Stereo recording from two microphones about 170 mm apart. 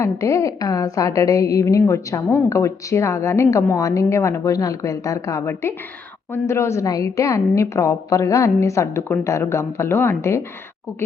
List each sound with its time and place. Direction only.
0.0 s a woman's voice: 15° left (ahead or behind)